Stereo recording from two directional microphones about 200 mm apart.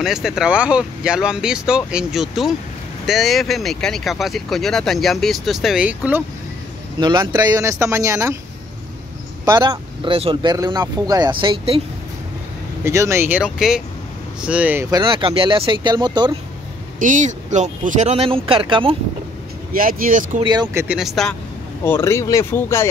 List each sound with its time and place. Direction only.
0.0 s speech: centre (ahead or behind)
7.0 s speech: 20° right (ahead or behind)
9.4 s speech: 20° right (ahead or behind)
12.8 s speech: 15° right (ahead or behind)
17.0 s speech: 40° right (ahead or behind)
19.7 s speech: 45° right (ahead or behind)
20.3 s speech: 20° right (ahead or behind)
20.6 s speech: 10° right (ahead or behind)
21.8 s speech: 10° left (ahead or behind)